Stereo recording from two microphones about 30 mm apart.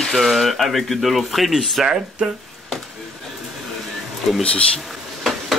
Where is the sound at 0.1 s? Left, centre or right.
Centre.